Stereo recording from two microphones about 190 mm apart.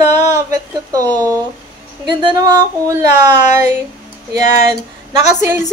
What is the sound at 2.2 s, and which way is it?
A woman's voice, 20° right (ahead or behind).